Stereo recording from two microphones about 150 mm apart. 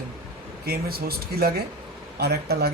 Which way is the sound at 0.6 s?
90° right.